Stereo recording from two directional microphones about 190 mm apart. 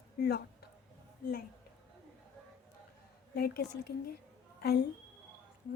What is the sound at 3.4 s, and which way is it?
A woman's voice, 55° left (ahead or behind).